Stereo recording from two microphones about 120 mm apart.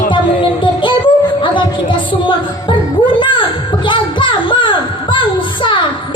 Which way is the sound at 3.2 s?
40° left (ahead or behind).